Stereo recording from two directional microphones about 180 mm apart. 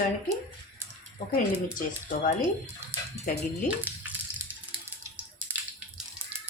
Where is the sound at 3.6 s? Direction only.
10° right (ahead or behind).